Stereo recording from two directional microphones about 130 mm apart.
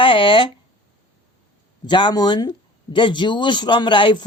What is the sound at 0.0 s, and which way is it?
Speech, 45° left (ahead or behind).